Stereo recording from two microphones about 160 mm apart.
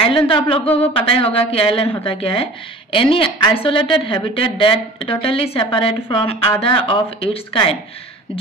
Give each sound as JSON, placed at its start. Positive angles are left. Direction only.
{"t": 0.3, "sound": "a woman's voice", "side_deg": 30}